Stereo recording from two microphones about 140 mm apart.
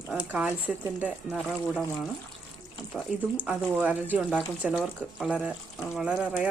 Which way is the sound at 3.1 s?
5° right (ahead or behind).